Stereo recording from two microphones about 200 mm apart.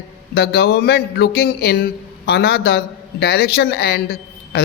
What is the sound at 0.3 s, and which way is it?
A man's voice, 55° left (ahead or behind).